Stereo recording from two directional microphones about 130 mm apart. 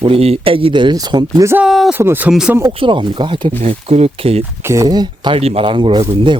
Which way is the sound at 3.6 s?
55° right (ahead or behind).